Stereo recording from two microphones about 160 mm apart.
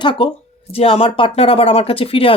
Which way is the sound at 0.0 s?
35° left (ahead or behind).